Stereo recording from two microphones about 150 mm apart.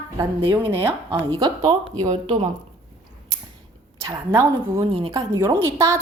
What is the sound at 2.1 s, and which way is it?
Speech, 40° right (ahead or behind).